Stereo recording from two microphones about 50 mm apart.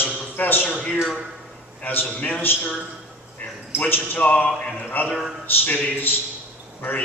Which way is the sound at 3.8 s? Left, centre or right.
Left.